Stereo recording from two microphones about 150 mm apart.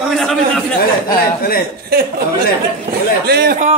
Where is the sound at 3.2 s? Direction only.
85° right.